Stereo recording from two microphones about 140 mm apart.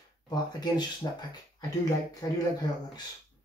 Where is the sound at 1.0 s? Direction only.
30° left (ahead or behind).